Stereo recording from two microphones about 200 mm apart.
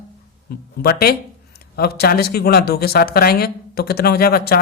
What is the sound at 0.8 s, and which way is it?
A man's voice, 50° left (ahead or behind).